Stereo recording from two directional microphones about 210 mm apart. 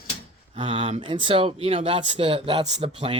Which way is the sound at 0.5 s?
25° right (ahead or behind).